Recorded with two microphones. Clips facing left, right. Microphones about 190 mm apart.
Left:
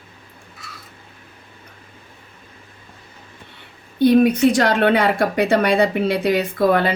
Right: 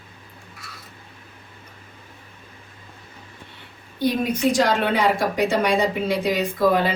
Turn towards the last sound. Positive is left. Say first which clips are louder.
# left 2 dB
turn(degrees=60)  # may be behind; listen again after turning